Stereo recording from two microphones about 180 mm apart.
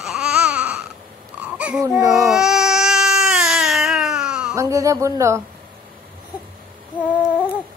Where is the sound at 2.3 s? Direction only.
Centre (ahead or behind).